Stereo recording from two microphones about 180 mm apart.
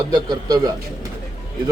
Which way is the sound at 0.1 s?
20° right (ahead or behind).